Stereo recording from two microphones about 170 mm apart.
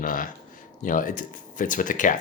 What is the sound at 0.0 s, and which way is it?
Speech, 55° left (ahead or behind).